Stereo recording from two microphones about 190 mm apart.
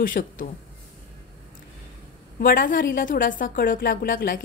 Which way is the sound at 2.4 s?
45° left (ahead or behind).